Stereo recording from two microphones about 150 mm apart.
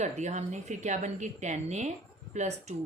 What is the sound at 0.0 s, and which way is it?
A woman's voice, 50° right (ahead or behind).